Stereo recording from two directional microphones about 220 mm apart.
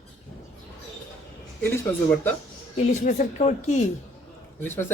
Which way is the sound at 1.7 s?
10° left (ahead or behind).